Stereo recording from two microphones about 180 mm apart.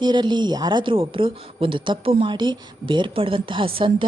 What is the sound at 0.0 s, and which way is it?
A woman's voice, 25° right (ahead or behind).